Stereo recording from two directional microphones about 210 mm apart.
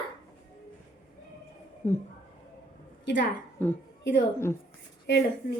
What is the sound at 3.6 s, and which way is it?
Speech, 10° left (ahead or behind).